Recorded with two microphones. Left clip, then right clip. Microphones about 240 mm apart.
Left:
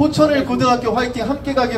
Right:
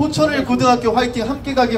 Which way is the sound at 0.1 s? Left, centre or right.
Right.